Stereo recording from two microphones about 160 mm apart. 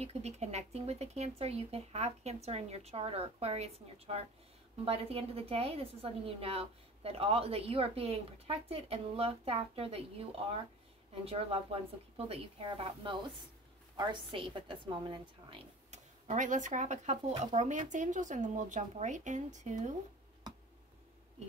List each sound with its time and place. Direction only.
0.0 s a woman's voice: 40° right (ahead or behind)
15.9 s speech: 50° right (ahead or behind)